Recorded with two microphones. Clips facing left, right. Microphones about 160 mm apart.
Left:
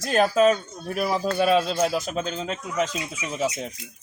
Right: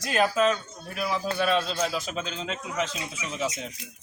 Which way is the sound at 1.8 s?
45° left (ahead or behind).